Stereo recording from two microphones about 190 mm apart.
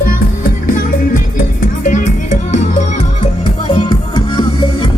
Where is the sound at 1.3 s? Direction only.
40° left (ahead or behind).